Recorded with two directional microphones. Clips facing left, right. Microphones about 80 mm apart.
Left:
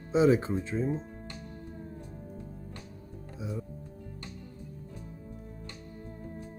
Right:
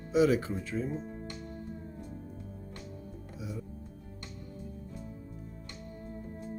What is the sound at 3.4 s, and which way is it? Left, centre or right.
Speech, left.